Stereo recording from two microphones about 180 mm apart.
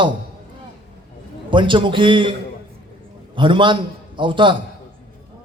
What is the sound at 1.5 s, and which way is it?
Speech, 25° right (ahead or behind).